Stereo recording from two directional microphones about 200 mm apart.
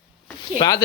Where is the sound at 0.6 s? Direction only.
20° left (ahead or behind).